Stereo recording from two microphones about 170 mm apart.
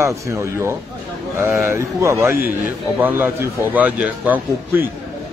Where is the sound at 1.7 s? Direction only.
15° right (ahead or behind).